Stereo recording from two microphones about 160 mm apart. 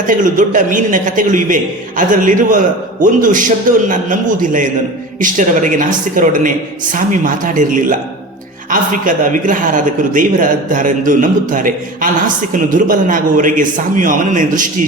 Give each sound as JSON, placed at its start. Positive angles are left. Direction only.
{"t": 0.1, "sound": "a man's voice", "side_deg": -55}